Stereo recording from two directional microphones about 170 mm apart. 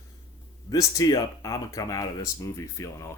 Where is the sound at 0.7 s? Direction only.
20° left (ahead or behind).